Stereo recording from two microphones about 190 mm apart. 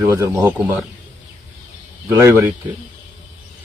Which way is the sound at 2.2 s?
15° right (ahead or behind).